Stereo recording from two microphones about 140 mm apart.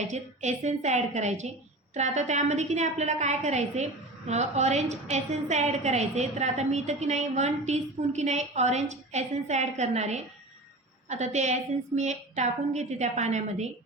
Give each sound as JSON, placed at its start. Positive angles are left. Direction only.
{"t": 0.1, "sound": "a woman's voice", "side_deg": -55}